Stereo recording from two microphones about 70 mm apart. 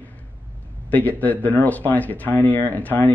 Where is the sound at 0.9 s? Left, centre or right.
Left.